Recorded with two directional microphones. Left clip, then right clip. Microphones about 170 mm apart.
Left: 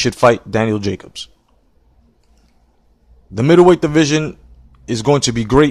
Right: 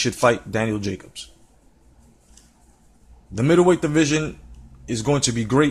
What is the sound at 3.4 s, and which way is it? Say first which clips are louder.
A man's voice: left 7 dB; 50° left (ahead or behind).